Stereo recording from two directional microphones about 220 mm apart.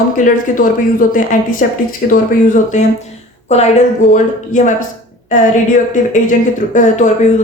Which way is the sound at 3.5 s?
30° left (ahead or behind).